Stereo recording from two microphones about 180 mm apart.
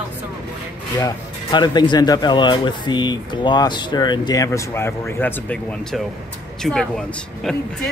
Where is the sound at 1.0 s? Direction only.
25° left (ahead or behind).